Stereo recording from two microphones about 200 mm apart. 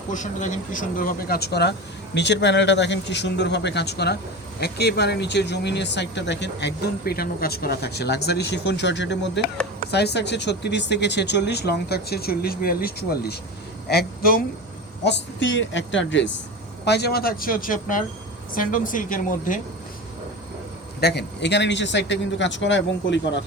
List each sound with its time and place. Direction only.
0.1 s a woman's voice: 40° left (ahead or behind)
15.0 s a woman's voice: 65° left (ahead or behind); by 19.6 s 40° left (ahead or behind)
21.0 s speech: 55° left (ahead or behind)